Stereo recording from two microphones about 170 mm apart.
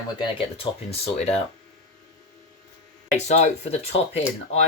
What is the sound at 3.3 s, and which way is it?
Speech, 40° left (ahead or behind).